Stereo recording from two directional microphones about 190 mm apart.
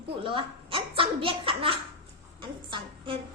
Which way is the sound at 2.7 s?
25° right (ahead or behind).